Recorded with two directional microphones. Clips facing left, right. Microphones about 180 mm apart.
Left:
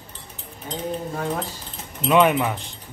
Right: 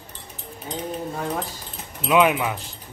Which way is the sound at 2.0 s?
5° right (ahead or behind).